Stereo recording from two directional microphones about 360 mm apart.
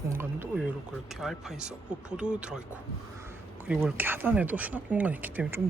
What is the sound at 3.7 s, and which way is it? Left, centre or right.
Speech, centre.